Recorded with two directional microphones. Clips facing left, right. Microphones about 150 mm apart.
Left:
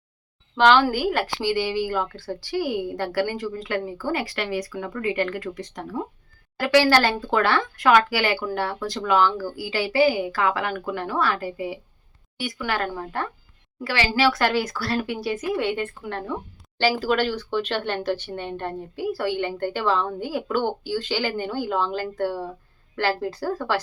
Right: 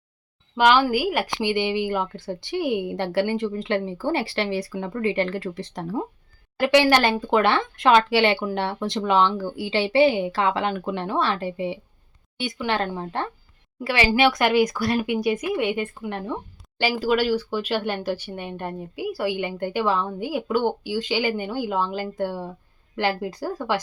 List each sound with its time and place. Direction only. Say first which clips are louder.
0.5 s a woman's voice: left 1 dB; 10° right (ahead or behind)